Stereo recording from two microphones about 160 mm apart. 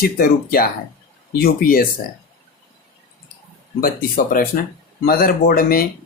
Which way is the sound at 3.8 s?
65° left (ahead or behind).